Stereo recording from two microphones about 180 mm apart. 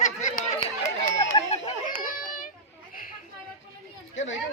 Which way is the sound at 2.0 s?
50° left (ahead or behind).